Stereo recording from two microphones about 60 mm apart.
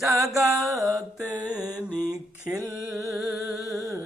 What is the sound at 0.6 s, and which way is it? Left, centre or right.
Mantra, centre.